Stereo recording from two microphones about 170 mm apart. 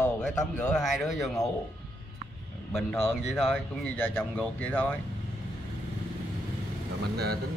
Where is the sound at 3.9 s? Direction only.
10° left (ahead or behind).